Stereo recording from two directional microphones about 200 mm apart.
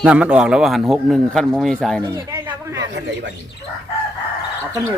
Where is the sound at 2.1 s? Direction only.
15° right (ahead or behind).